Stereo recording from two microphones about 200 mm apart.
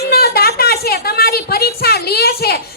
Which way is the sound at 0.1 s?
50° left (ahead or behind).